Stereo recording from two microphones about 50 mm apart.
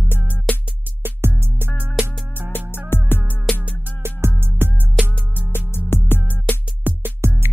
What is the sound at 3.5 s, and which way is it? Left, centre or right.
Music, centre.